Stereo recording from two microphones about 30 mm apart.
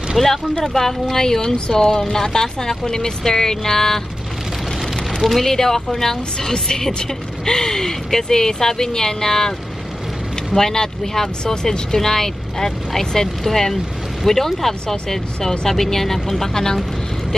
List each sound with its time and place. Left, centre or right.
0.2 s speech: centre
5.2 s speech: centre
10.5 s speech: centre